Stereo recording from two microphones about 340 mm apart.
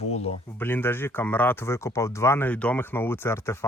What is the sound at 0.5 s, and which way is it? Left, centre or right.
Speech, centre.